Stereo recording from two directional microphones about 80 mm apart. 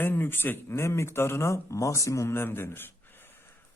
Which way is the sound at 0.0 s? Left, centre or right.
Left.